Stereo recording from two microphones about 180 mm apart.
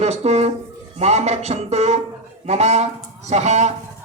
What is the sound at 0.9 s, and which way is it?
Speech, 40° right (ahead or behind).